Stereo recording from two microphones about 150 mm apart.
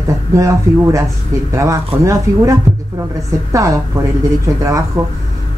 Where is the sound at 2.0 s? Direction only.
20° right (ahead or behind).